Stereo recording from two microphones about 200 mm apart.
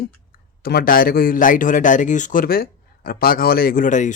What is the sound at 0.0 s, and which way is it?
Speech, 50° left (ahead or behind).